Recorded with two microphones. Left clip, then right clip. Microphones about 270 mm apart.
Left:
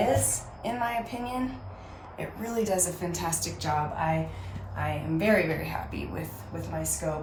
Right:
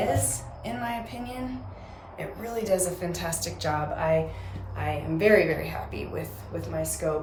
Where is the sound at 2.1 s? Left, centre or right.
Centre.